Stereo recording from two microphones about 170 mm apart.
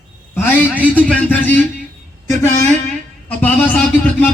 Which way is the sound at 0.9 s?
10° left (ahead or behind).